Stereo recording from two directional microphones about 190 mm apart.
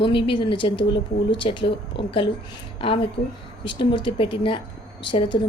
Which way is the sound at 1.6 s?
65° left (ahead or behind).